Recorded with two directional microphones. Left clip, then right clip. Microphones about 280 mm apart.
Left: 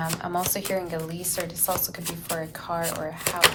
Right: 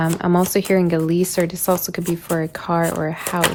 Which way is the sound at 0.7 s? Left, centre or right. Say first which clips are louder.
Right 11 dB; right.